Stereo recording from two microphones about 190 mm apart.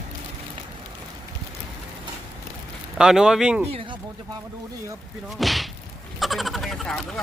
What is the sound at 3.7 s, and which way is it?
Speech, 30° right (ahead or behind).